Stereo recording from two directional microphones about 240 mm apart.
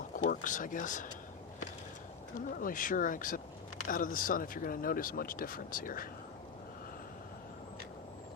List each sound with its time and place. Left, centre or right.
0.3 s speech: left
2.3 s speech: left